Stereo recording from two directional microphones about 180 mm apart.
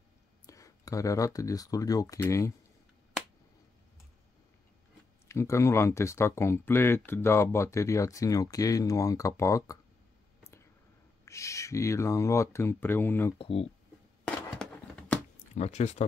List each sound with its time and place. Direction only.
0.5 s speech: 20° left (ahead or behind)
5.3 s speech: 15° left (ahead or behind)
10.4 s a sound: 15° left (ahead or behind)
11.2 s speech: 15° left (ahead or behind)
13.4 s speech: 35° left (ahead or behind)
14.2 s a sound: 5° left (ahead or behind)
15.5 s speech: 40° left (ahead or behind)